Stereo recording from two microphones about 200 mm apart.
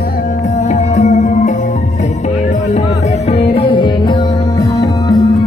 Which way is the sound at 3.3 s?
30° left (ahead or behind).